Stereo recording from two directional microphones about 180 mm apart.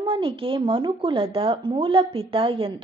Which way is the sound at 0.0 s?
30° right (ahead or behind).